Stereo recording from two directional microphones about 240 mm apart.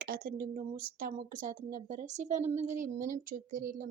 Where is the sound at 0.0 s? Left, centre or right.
Right.